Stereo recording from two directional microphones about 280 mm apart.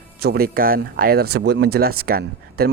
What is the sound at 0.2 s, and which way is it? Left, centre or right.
Speech, right.